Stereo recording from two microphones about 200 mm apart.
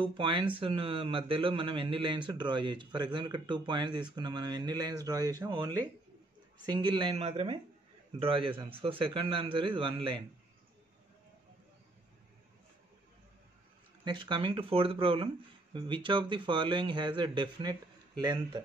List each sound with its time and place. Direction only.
0.0 s a man's voice: 25° right (ahead or behind)
14.0 s a man's voice: 25° right (ahead or behind)